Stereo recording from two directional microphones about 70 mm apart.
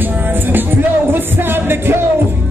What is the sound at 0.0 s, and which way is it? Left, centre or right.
Music, right.